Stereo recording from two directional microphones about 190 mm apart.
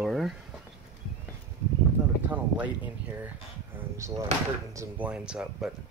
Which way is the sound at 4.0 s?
15° right (ahead or behind).